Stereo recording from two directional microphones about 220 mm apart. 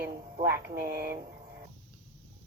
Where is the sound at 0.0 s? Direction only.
10° right (ahead or behind).